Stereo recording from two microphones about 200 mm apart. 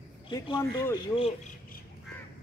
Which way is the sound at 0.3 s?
20° left (ahead or behind).